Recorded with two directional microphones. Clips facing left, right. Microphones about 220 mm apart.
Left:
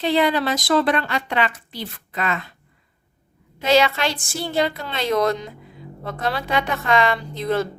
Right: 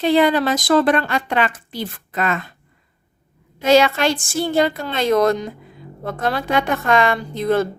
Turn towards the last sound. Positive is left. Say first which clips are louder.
# right 4 dB
turn(degrees=-50)  # may be behind; listen again after turning